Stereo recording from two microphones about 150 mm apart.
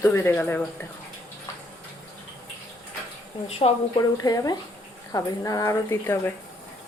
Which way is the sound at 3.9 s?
25° left (ahead or behind).